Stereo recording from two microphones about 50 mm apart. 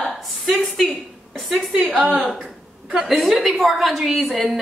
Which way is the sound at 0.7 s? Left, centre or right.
Centre.